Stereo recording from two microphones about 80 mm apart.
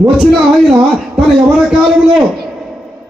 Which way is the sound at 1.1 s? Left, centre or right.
Centre.